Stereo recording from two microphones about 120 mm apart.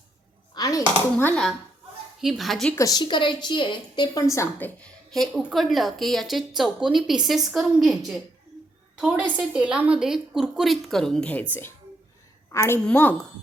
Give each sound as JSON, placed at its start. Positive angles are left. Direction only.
{"t": 0.5, "sound": "chopping", "side_deg": 30}
{"t": 2.2, "sound": "a woman's voice", "side_deg": 0}
{"t": 2.7, "sound": "a woman's voice", "side_deg": 30}
{"t": 4.8, "sound": "a woman's voice", "side_deg": 0}
{"t": 12.5, "sound": "a woman's voice", "side_deg": 25}